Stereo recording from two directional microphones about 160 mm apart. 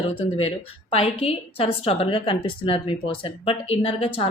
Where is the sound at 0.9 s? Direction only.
35° left (ahead or behind).